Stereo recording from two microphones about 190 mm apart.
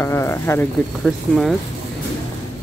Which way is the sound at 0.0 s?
15° left (ahead or behind).